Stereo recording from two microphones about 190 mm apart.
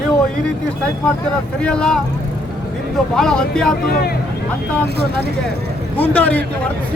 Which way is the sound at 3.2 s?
5° left (ahead or behind).